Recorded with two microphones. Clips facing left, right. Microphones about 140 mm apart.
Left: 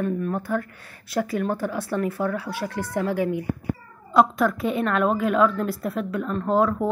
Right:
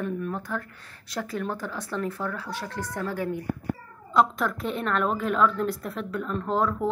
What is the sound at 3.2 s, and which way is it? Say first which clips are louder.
Speech: left 5 dB; 10° left (ahead or behind).